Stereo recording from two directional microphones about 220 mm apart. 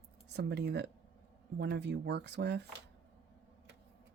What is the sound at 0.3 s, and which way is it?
Speech, 50° right (ahead or behind).